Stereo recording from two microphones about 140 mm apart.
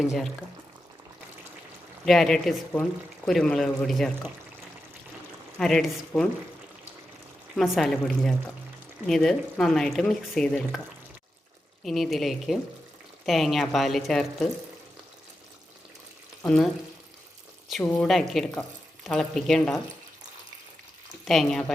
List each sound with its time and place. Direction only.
0.0 s speech: centre (ahead or behind)
2.0 s speech: centre (ahead or behind)
5.5 s speech: 5° left (ahead or behind)
7.5 s speech: centre (ahead or behind)
11.8 s speech: centre (ahead or behind)
17.7 s speech: centre (ahead or behind)
21.2 s speech: centre (ahead or behind)